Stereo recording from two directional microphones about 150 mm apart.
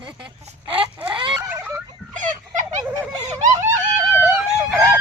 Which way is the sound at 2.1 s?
55° right (ahead or behind).